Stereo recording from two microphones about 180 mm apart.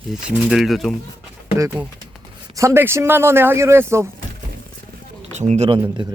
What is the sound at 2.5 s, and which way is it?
Speech, 15° right (ahead or behind).